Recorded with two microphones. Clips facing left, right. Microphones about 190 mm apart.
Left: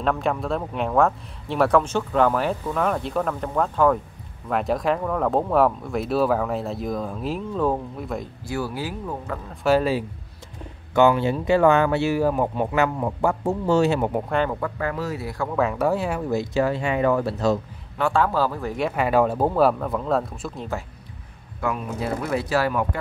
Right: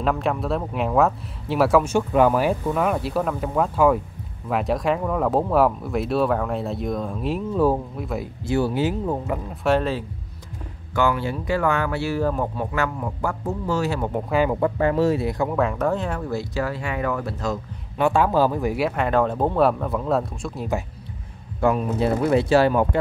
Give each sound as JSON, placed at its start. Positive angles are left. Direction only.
{"t": 0.0, "sound": "speech", "side_deg": 0}
{"t": 8.5, "sound": "speech", "side_deg": -25}
{"t": 9.6, "sound": "speech", "side_deg": 5}
{"t": 11.0, "sound": "speech", "side_deg": 20}
{"t": 14.3, "sound": "speech", "side_deg": -5}
{"t": 14.6, "sound": "speech", "side_deg": -25}
{"t": 15.5, "sound": "speech", "side_deg": 0}
{"t": 17.9, "sound": "speech", "side_deg": -15}
{"t": 18.9, "sound": "speech", "side_deg": 5}
{"t": 21.5, "sound": "speech", "side_deg": -30}